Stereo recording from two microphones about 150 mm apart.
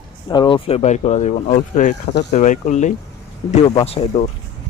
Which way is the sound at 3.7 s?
40° left (ahead or behind).